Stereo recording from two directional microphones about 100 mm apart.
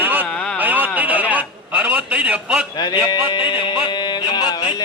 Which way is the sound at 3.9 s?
50° left (ahead or behind).